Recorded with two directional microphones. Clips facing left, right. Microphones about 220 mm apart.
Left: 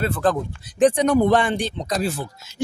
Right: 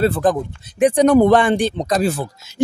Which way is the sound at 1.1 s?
90° right.